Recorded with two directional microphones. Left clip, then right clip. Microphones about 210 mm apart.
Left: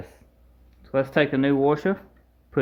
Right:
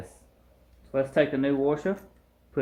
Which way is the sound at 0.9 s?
45° left (ahead or behind).